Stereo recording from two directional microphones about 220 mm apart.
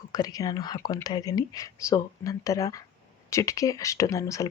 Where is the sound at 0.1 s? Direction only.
15° left (ahead or behind).